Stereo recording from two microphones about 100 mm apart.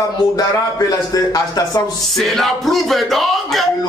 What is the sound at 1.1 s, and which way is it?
Speech, 40° left (ahead or behind).